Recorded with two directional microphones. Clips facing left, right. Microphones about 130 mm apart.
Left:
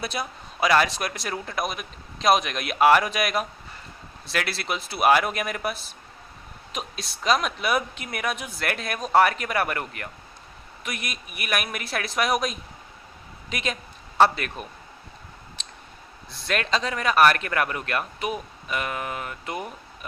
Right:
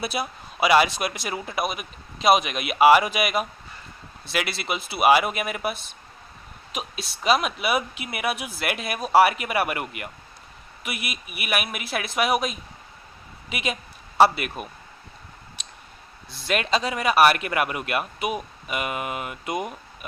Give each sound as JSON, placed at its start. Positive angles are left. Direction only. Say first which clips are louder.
{"t": 0.0, "sound": "a man's voice", "louder": "right 2 dB", "side_deg": -5}
{"t": 16.3, "sound": "a man's voice", "louder": "right 2 dB", "side_deg": 0}